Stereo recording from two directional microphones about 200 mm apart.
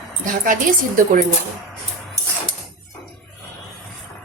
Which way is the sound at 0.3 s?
40° right (ahead or behind).